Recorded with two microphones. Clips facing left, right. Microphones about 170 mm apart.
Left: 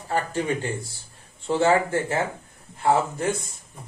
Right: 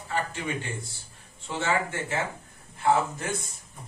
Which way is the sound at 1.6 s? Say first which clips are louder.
Left 7 dB; 35° left (ahead or behind).